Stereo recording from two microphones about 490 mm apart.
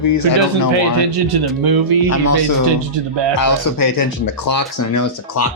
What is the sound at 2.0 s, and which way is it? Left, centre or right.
Speech, left.